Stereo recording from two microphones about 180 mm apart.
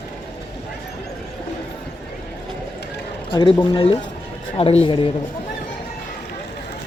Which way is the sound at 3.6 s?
30° left (ahead or behind).